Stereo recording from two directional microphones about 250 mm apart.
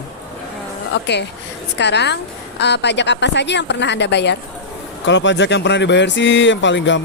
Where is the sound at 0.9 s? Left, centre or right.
Left.